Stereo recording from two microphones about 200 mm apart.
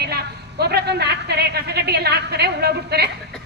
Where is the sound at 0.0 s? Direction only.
55° right (ahead or behind).